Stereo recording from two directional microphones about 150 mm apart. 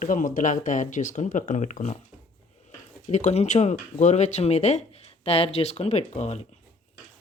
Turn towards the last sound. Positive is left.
turn(degrees=45)  # may be behind; listen again after turning